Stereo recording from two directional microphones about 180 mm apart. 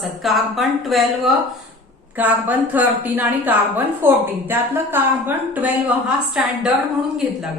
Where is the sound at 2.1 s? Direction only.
10° right (ahead or behind).